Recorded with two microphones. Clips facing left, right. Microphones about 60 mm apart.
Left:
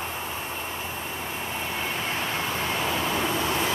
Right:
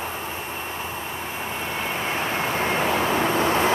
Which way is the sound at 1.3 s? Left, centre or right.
Centre.